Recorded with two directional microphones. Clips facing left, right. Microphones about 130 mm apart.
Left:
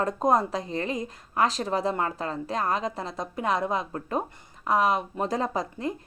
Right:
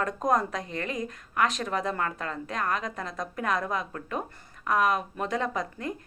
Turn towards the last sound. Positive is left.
turn(degrees=30)  # may be behind; listen again after turning